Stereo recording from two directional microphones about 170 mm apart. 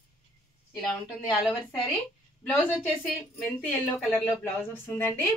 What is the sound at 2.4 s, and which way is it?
A woman's voice, 5° left (ahead or behind).